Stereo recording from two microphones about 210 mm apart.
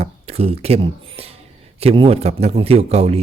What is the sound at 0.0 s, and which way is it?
Speech, 30° right (ahead or behind).